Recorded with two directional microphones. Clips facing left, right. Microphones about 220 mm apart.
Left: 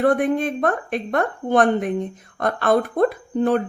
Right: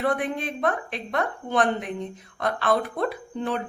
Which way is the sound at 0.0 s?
50° left (ahead or behind).